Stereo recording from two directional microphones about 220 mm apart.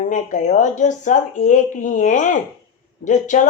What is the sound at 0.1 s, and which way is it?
Speech, 35° left (ahead or behind).